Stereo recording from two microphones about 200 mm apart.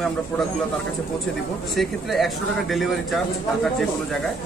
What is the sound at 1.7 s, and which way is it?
A man's voice, centre (ahead or behind).